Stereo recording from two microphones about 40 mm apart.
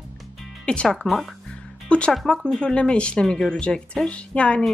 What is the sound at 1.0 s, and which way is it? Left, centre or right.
A woman's voice, left.